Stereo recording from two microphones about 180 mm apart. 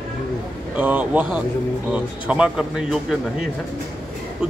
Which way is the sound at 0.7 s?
10° right (ahead or behind).